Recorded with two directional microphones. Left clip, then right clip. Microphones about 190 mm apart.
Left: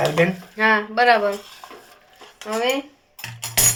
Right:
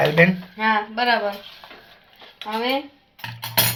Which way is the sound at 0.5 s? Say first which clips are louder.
Left 3 dB; 50° left (ahead or behind).